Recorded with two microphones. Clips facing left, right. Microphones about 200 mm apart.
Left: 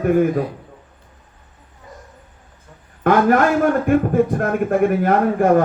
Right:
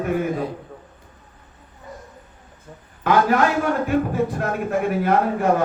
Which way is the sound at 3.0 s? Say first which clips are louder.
Left 3 dB; 50° left (ahead or behind).